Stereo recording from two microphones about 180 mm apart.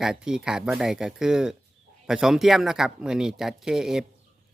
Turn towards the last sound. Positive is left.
turn(degrees=-5)  # may be behind; listen again after turning